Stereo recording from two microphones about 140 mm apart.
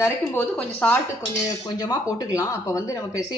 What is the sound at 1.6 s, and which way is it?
Speech, 30° left (ahead or behind).